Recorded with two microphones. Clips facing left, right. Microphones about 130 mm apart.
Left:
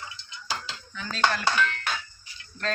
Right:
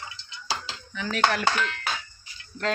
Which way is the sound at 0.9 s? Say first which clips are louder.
Right 6 dB; 85° right.